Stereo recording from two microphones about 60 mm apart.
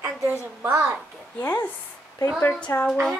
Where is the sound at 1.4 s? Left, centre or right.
Left.